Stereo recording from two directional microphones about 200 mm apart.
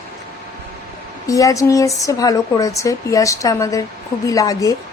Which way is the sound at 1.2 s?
15° left (ahead or behind).